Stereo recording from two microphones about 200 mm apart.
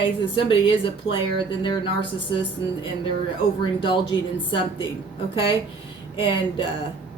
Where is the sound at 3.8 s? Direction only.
25° left (ahead or behind).